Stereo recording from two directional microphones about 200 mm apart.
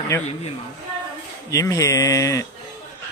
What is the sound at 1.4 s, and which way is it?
A man's voice, 15° left (ahead or behind).